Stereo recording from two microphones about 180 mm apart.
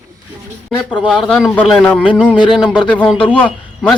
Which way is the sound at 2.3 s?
25° left (ahead or behind).